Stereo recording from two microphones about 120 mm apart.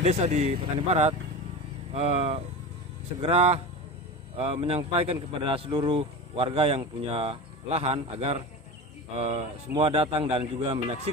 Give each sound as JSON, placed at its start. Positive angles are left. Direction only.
{"t": 0.0, "sound": "a man's voice", "side_deg": -65}